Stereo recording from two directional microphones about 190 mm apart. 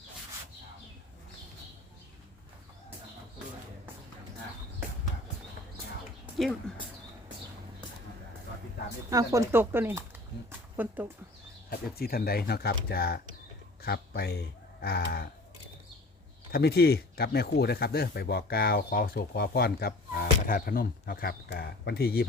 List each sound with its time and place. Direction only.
6.3 s speech: centre (ahead or behind)
9.0 s speech: 15° right (ahead or behind)
11.7 s speech: 55° left (ahead or behind)
16.5 s speech: 55° left (ahead or behind)